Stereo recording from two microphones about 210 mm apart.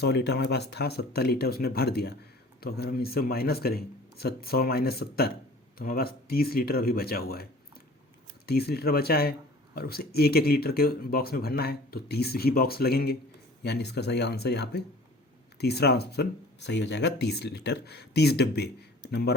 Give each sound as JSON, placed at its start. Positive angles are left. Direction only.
{"t": 0.0, "sound": "speech", "side_deg": 50}
{"t": 8.4, "sound": "speech", "side_deg": 50}